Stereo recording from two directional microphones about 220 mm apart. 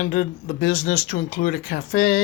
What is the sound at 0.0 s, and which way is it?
Speech, 40° left (ahead or behind).